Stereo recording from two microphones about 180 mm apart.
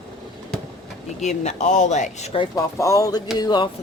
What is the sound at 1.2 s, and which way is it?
Speech, 40° left (ahead or behind).